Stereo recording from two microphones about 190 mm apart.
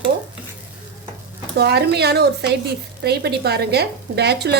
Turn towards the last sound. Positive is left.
turn(degrees=-60)  # may be behind; listen again after turning